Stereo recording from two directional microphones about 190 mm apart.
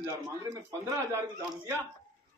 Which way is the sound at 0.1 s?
20° right (ahead or behind).